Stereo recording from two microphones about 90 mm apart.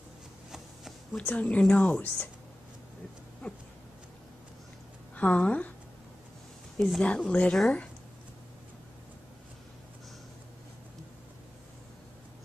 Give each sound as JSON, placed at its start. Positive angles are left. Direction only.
{"t": 1.1, "sound": "a woman's voice", "side_deg": 15}
{"t": 3.4, "sound": "a sound", "side_deg": 20}
{"t": 5.1, "sound": "a woman's voice", "side_deg": 15}
{"t": 6.8, "sound": "a woman's voice", "side_deg": 10}